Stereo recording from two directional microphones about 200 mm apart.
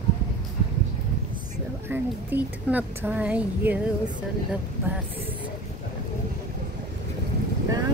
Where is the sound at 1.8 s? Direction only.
10° right (ahead or behind).